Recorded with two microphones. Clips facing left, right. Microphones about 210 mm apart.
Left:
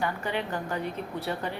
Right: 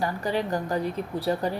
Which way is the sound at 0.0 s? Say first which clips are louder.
Right 3 dB; 40° right (ahead or behind).